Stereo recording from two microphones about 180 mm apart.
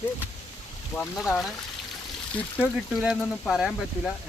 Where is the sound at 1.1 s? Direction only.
Centre (ahead or behind).